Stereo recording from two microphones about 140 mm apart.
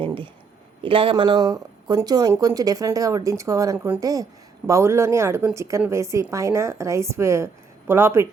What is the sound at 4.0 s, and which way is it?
Speech, 25° right (ahead or behind).